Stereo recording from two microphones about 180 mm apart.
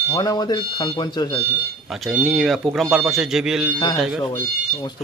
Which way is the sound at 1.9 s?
Centre (ahead or behind).